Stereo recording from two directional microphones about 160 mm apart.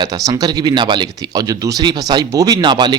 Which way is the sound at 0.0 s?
25° right (ahead or behind).